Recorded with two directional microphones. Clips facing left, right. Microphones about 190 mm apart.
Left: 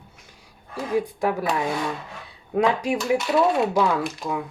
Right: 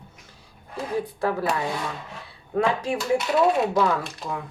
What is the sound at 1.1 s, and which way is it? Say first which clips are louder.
Speech: left 1 dB; 15° left (ahead or behind).